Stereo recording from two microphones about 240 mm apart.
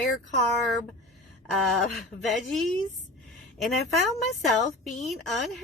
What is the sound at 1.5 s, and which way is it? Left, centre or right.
A woman's voice, centre.